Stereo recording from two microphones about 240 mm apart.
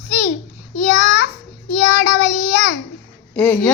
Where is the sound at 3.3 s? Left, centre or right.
Centre.